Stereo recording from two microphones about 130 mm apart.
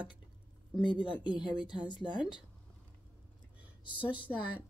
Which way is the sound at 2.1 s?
35° left (ahead or behind).